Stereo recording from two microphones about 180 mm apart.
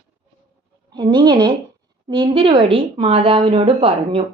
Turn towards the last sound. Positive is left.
turn(degrees=-30)  # may be behind; listen again after turning